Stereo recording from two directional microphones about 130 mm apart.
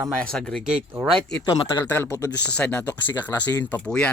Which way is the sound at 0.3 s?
5° left (ahead or behind).